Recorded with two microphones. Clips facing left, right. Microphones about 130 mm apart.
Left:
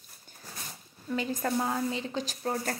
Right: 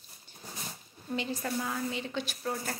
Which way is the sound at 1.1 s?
45° left (ahead or behind).